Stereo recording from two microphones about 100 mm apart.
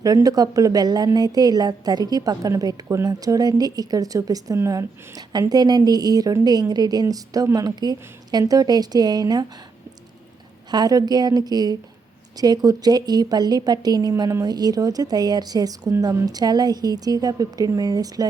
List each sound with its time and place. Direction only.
0.0 s a woman's voice: 35° right (ahead or behind)
10.7 s a woman's voice: 40° right (ahead or behind)